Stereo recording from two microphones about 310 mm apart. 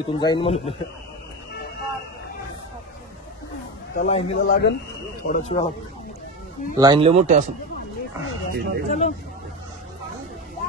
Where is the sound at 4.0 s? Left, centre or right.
Centre.